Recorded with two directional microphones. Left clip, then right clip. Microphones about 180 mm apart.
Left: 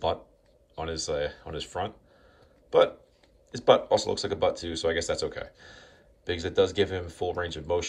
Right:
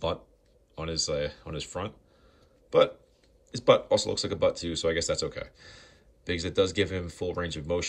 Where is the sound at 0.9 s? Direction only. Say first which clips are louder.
Right 1 dB; 20° left (ahead or behind).